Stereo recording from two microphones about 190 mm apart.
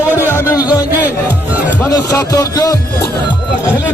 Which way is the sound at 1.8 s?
20° left (ahead or behind).